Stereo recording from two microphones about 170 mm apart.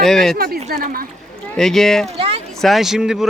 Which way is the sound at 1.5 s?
Centre (ahead or behind).